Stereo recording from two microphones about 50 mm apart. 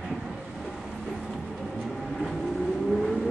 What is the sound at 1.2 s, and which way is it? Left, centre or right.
Vehicle, centre.